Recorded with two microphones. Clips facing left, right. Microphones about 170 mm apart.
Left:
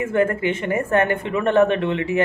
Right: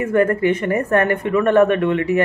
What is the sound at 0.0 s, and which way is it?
A woman's voice, 25° left (ahead or behind).